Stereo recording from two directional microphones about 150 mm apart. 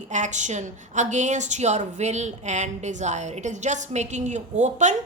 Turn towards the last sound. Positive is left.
turn(degrees=-50)  # may be behind; listen again after turning